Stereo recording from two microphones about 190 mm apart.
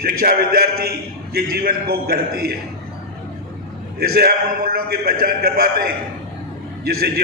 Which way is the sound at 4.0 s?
55° right (ahead or behind).